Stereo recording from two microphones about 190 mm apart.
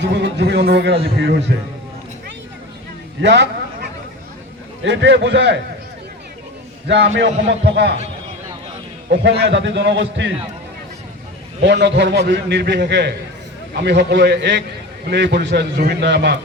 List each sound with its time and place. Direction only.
0.0 s a man's voice: 65° right (ahead or behind)
3.2 s a man's voice: 65° right (ahead or behind)
6.8 s a man's voice: 70° right (ahead or behind)
9.1 s a man's voice: 70° right (ahead or behind)
11.6 s a man's voice: 65° right (ahead or behind)